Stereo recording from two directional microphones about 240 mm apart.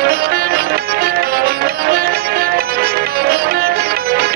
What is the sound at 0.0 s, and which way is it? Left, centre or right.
Music, right.